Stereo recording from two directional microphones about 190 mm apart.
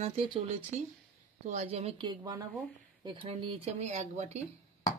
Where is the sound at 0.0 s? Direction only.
35° right (ahead or behind).